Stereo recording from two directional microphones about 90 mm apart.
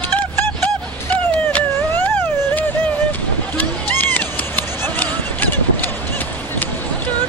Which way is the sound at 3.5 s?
20° left (ahead or behind).